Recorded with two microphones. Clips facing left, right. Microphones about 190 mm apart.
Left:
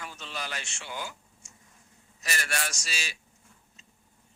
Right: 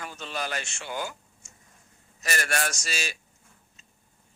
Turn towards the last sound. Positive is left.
turn(degrees=-50)  # may be behind; listen again after turning